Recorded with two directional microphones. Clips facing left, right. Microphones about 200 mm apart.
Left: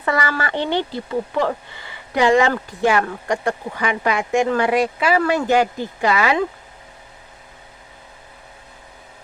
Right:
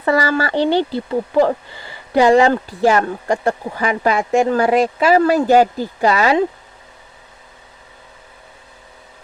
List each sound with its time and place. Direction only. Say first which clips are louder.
0.0 s speech: right 5 dB; 30° right (ahead or behind)